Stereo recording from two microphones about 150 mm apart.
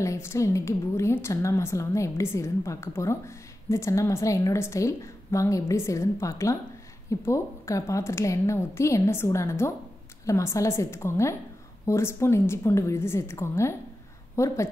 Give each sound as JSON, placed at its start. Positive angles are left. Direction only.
{"t": 0.0, "sound": "a woman's voice", "side_deg": 20}